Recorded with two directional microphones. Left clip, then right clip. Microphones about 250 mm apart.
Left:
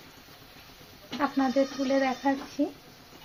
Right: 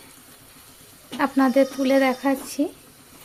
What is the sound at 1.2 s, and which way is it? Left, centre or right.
Speech, right.